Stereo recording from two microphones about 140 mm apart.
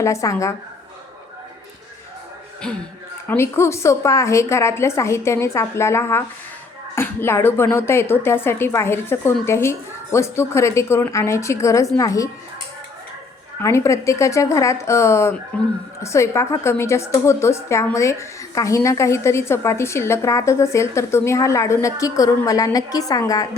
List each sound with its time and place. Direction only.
0.0 s a woman's voice: 20° left (ahead or behind)
2.6 s speech: 5° left (ahead or behind)
3.2 s a woman's voice: 20° left (ahead or behind)
13.6 s a woman's voice: 20° left (ahead or behind)